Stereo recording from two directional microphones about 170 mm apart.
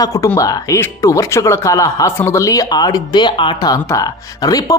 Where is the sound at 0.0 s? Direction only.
20° left (ahead or behind).